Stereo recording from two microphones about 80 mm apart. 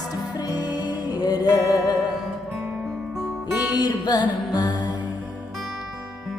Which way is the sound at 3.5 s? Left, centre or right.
Centre.